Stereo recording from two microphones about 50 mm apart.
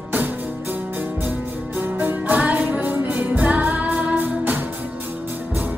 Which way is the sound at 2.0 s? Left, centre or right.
Right.